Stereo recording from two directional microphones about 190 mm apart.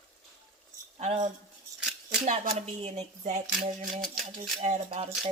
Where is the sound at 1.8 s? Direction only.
5° right (ahead or behind).